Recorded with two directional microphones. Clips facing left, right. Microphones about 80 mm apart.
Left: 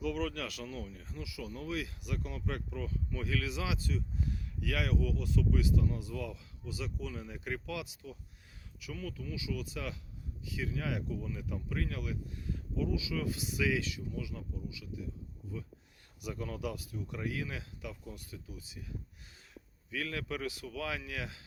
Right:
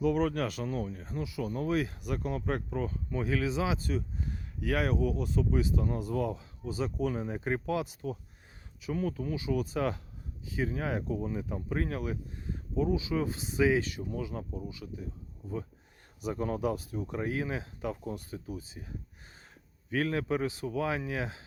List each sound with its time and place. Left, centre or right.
0.0 s speech: right
5.8 s speech: right
20.1 s speech: right